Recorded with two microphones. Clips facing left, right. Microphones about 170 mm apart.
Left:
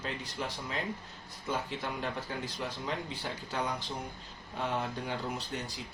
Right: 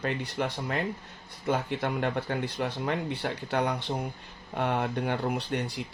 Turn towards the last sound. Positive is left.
turn(degrees=-65)  # may be behind; listen again after turning